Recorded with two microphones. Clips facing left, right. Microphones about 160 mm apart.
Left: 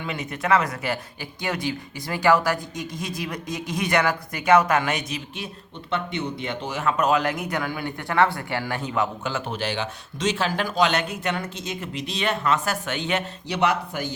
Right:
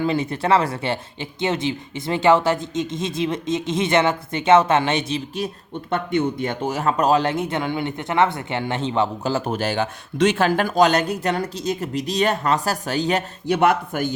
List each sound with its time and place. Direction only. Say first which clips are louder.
0.0 s speech: right 8 dB; 30° right (ahead or behind)
5.9 s speech: right 6 dB; 50° right (ahead or behind)